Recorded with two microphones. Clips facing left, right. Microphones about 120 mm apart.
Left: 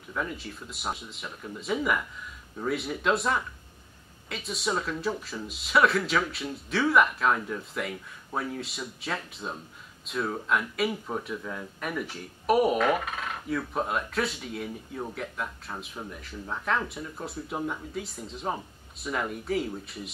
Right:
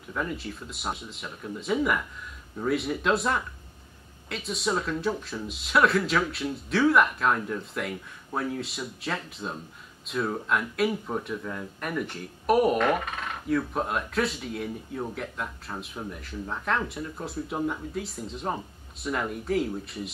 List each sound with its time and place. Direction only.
0.1 s speech: centre (ahead or behind)